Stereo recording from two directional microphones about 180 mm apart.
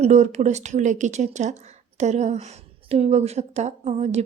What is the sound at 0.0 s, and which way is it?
A woman's voice, 40° right (ahead or behind).